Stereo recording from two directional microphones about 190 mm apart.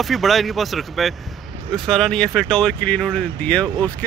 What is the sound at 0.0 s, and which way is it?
Speech, centre (ahead or behind).